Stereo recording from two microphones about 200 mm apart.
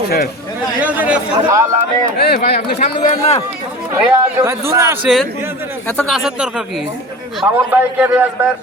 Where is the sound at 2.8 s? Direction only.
30° left (ahead or behind).